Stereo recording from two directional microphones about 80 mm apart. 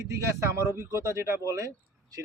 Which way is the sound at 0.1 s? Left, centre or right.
Right.